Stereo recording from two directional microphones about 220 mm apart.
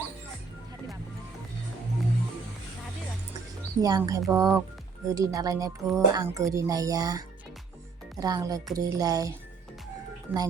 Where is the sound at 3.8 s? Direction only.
15° right (ahead or behind).